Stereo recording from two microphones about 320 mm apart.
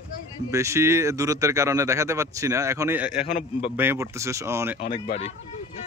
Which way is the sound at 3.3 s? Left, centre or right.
Centre.